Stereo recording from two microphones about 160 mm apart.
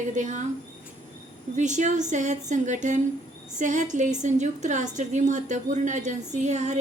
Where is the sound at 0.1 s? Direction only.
50° right (ahead or behind).